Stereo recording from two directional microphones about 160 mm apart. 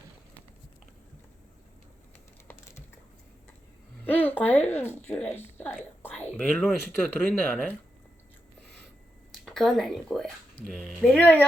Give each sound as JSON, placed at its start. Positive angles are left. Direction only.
{"t": 2.5, "sound": "a sound", "side_deg": 15}
{"t": 4.0, "sound": "speech", "side_deg": 10}
{"t": 9.3, "sound": "speech", "side_deg": 0}